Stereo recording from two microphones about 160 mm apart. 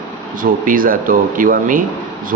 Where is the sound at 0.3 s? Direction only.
60° right (ahead or behind).